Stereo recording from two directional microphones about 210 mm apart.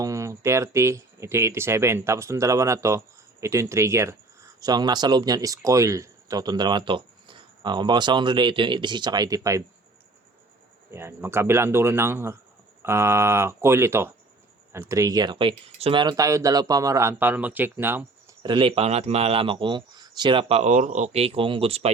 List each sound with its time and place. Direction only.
0.0 s speech: 15° right (ahead or behind)
10.9 s speech: 10° right (ahead or behind)
18.4 s speech: 25° right (ahead or behind)